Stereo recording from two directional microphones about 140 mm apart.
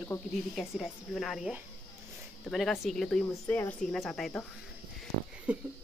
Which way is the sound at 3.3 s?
20° left (ahead or behind).